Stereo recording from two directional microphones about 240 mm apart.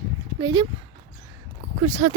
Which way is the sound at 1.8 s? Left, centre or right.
Right.